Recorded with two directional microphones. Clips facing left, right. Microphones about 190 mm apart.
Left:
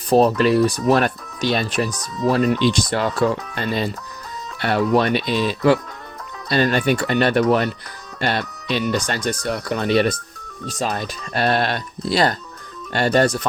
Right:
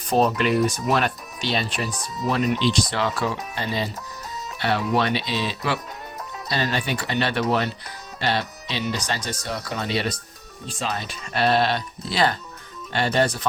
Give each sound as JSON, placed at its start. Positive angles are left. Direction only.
{"t": 0.1, "sound": "speech", "side_deg": 35}
{"t": 2.9, "sound": "speech", "side_deg": 50}